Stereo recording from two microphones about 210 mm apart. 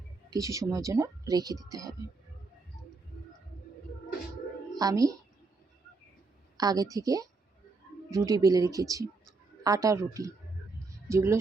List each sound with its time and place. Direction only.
0.3 s speech: 15° right (ahead or behind)
4.8 s speech: 15° right (ahead or behind)
6.6 s speech: 20° right (ahead or behind)